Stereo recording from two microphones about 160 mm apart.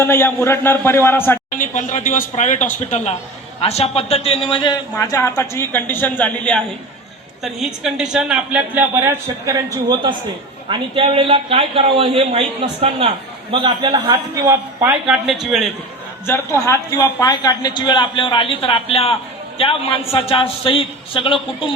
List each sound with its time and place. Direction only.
0.0 s a man's voice: 15° left (ahead or behind)
1.5 s a man's voice: 55° left (ahead or behind); by 6.6 s 10° left (ahead or behind)
7.4 s a man's voice: 5° right (ahead or behind)
16.2 s a man's voice: 15° left (ahead or behind); by 21.7 s 30° left (ahead or behind)